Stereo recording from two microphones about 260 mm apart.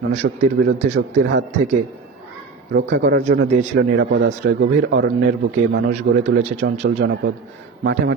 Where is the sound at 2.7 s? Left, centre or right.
Right.